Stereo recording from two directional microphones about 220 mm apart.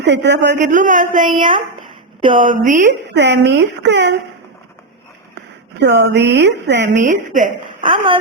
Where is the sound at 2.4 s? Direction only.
35° right (ahead or behind).